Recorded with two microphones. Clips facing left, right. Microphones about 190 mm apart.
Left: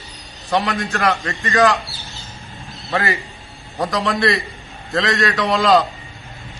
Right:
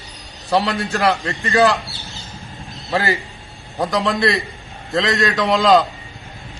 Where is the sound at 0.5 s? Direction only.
35° right (ahead or behind).